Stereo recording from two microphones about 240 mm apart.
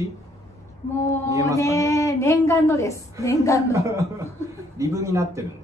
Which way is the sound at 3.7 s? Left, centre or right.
Centre.